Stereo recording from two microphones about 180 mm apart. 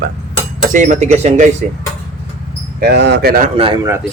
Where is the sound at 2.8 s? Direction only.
65° right (ahead or behind).